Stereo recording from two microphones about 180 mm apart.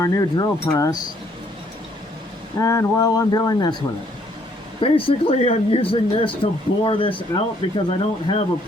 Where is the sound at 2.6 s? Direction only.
15° left (ahead or behind).